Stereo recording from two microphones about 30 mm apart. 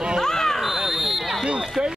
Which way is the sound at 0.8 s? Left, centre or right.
Centre.